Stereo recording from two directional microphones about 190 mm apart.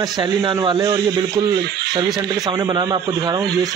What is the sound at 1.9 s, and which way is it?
Speech, 20° right (ahead or behind).